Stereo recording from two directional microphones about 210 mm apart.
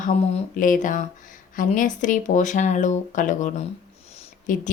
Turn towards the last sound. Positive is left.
turn(degrees=40)  # may be behind; listen again after turning